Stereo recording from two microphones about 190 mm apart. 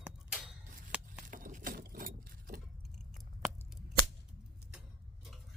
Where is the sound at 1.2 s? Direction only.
45° right (ahead or behind).